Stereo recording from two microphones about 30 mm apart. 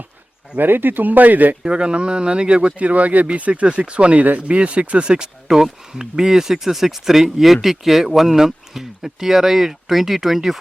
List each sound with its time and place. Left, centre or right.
0.5 s speech: right
1.6 s speech: right
2.7 s speech: right
5.5 s speech: centre